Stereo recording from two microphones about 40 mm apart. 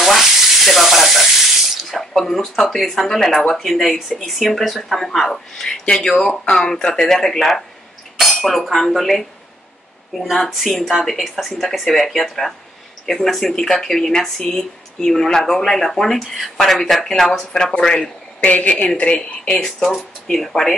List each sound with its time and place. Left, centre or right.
0.0 s water tap: centre
2.2 s a man's voice: centre
18.4 s speech: left
19.5 s speech: centre